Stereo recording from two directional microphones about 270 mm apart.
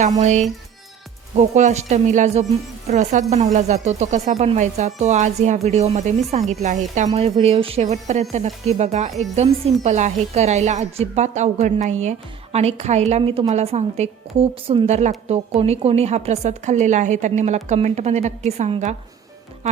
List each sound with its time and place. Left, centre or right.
0.2 s speech: right